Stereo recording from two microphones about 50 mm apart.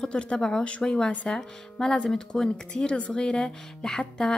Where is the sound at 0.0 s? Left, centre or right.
Left.